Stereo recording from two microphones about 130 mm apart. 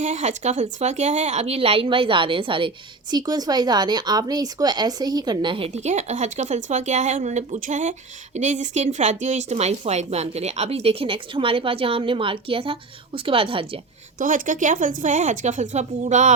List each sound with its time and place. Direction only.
0.0 s speech: 60° right (ahead or behind); by 13.7 s 45° right (ahead or behind)
14.2 s speech: 90° right; by 16.3 s 65° right (ahead or behind)